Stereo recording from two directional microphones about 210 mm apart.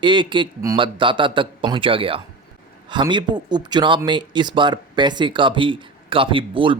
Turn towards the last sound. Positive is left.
turn(degrees=-25)  # may be behind; listen again after turning